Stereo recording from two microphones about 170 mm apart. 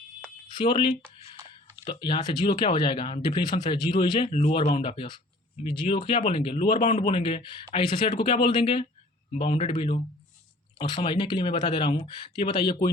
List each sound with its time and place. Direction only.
0.5 s speech: 30° left (ahead or behind)
4.3 s speech: 35° left (ahead or behind)